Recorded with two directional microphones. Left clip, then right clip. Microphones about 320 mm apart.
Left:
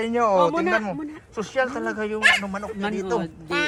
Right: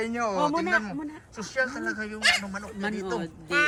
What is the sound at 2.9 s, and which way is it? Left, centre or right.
Speech, centre.